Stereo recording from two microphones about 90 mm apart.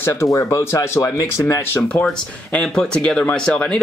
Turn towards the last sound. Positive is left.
turn(degrees=10)  # may be behind; listen again after turning